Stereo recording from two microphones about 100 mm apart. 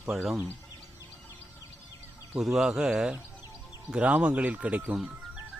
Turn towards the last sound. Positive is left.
turn(degrees=-10)  # may be behind; listen again after turning